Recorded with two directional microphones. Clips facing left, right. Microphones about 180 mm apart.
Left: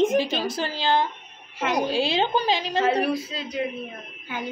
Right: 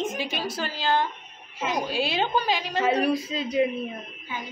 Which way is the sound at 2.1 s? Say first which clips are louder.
Left 2 dB; 25° left (ahead or behind).